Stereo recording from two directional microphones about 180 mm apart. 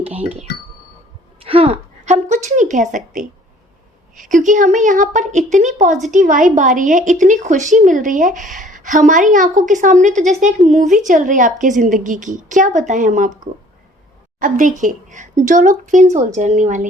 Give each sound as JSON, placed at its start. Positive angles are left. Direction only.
{"t": 1.5, "sound": "a sound", "side_deg": -30}
{"t": 4.1, "sound": "a woman's voice", "side_deg": -45}
{"t": 14.3, "sound": "a woman's voice", "side_deg": -45}